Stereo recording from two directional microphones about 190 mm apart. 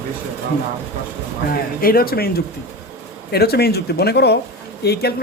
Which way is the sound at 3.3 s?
55° left (ahead or behind).